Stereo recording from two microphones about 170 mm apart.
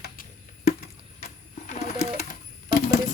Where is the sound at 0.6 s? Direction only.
45° left (ahead or behind).